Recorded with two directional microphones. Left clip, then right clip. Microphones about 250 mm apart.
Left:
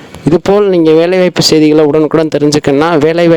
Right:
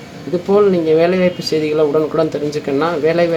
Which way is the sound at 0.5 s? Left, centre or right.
Left.